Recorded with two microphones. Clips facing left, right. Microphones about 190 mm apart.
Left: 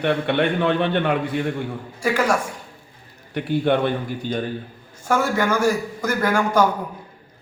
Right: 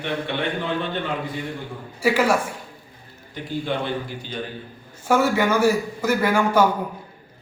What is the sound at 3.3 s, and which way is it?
Speech, 60° left (ahead or behind).